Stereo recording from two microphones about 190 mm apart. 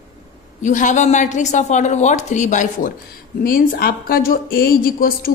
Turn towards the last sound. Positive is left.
turn(degrees=50)  # may be behind; listen again after turning